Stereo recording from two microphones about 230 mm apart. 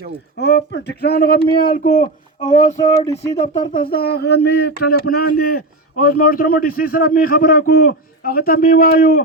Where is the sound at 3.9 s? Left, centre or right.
Left.